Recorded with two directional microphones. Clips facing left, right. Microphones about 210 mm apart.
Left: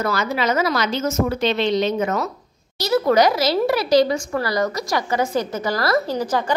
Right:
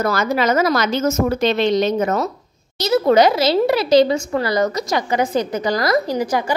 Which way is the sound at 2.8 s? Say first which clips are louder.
Right 3 dB; 25° right (ahead or behind).